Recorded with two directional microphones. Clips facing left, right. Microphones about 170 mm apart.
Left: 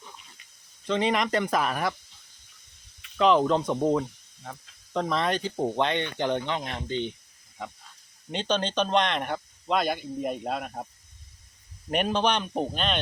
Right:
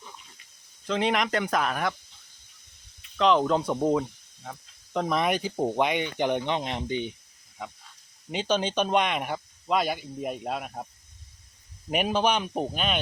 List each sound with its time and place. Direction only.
0.9 s speech: centre (ahead or behind)
3.2 s speech: centre (ahead or behind); by 7.1 s 15° right (ahead or behind)
8.3 s speech: 10° right (ahead or behind)
11.9 s speech: 5° right (ahead or behind)